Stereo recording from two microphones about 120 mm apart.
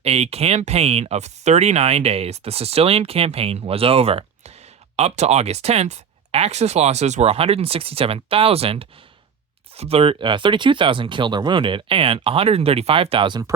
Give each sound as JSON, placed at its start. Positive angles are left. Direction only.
{"t": 0.0, "sound": "speech", "side_deg": -60}